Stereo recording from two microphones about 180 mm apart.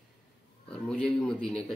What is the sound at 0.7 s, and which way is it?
Speech, 5° left (ahead or behind).